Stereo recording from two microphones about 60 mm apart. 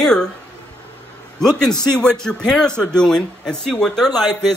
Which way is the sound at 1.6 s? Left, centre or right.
Centre.